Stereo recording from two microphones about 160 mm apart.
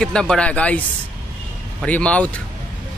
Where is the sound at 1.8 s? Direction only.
10° left (ahead or behind).